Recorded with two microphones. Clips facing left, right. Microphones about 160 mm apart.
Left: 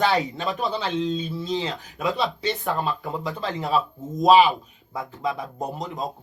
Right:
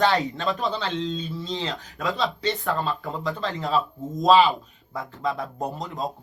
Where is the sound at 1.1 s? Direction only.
5° left (ahead or behind).